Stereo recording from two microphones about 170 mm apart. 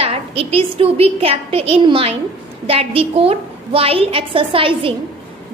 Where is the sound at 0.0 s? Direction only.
35° right (ahead or behind).